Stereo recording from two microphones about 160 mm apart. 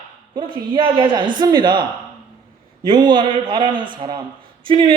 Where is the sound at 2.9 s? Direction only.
30° right (ahead or behind).